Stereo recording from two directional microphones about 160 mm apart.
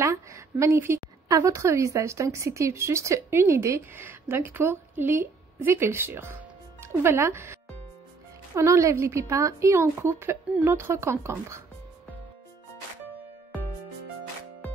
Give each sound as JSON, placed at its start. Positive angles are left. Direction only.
{"t": 0.0, "sound": "a woman's voice", "side_deg": -20}
{"t": 8.5, "sound": "a woman's voice", "side_deg": -15}